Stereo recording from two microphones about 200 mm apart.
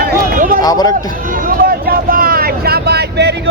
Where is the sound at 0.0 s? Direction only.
45° right (ahead or behind).